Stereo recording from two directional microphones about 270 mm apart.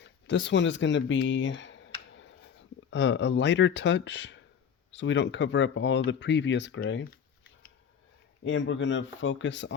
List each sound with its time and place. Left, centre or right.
0.0 s a sound: left
2.9 s speech: left
8.4 s speech: left